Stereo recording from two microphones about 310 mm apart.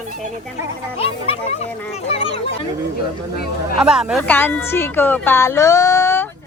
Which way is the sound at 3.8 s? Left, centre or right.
Centre.